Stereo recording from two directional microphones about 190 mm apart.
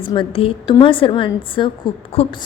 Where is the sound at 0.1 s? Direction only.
25° left (ahead or behind).